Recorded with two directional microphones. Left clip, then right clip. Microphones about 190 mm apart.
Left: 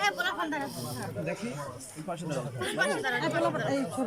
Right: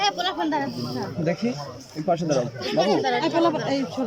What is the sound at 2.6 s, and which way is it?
Speech, 20° right (ahead or behind).